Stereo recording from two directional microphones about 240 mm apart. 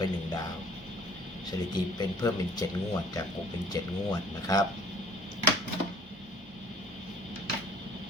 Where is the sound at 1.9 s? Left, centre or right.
Centre.